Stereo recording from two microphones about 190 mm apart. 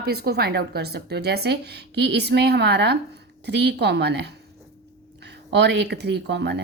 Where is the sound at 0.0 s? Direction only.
55° right (ahead or behind).